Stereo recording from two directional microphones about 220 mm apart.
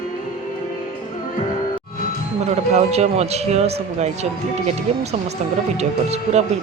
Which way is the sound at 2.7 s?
30° right (ahead or behind).